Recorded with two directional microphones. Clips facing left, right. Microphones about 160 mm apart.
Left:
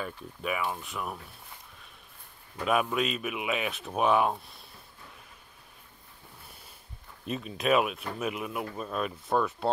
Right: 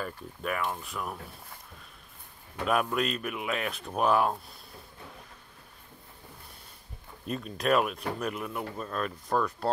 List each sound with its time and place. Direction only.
0.0 s speech: 5° left (ahead or behind)
2.6 s speech: centre (ahead or behind)
7.2 s speech: centre (ahead or behind)